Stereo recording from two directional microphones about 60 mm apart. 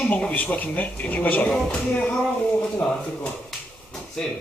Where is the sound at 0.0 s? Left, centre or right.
Centre.